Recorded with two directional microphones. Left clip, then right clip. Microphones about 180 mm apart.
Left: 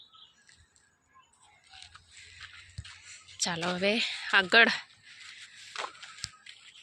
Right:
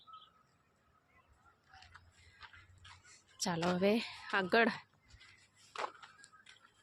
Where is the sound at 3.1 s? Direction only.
20° right (ahead or behind).